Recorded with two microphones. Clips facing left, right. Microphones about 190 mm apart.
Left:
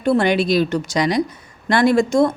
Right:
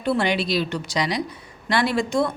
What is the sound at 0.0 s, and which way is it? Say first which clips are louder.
Speech: left 6 dB; 45° left (ahead or behind).